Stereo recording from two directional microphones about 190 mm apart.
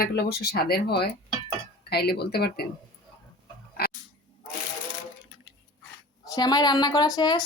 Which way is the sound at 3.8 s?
55° left (ahead or behind).